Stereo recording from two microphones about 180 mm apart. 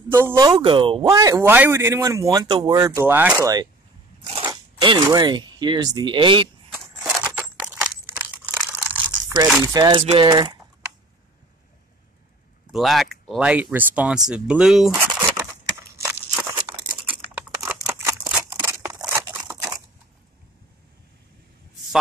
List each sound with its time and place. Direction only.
0.6 s speech: 30° right (ahead or behind)
1.0 s speech: 20° right (ahead or behind)
7.0 s a sound: 5° right (ahead or behind)
9.6 s speech: 15° right (ahead or behind)
9.9 s speech: 30° right (ahead or behind)
12.7 s speech: centre (ahead or behind)
14.9 s a sound: 15° right (ahead or behind)
16.1 s crumpling: 10° right (ahead or behind)